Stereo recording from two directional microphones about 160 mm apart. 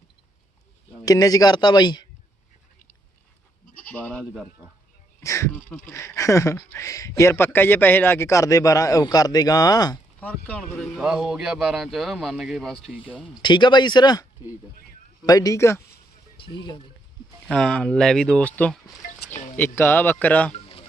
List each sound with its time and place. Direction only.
1.0 s speech: 20° left (ahead or behind)
3.8 s goat: 10° left (ahead or behind)
5.2 s speech: 20° left (ahead or behind)
5.5 s speech: 10° left (ahead or behind); by 10.0 s 25° left (ahead or behind)
10.2 s speech: 10° left (ahead or behind); by 13.4 s 5° right (ahead or behind)
13.4 s speech: 30° left (ahead or behind)
15.3 s speech: 20° left (ahead or behind)
17.5 s speech: 5° left (ahead or behind)
20.5 s a sound: 35° left (ahead or behind)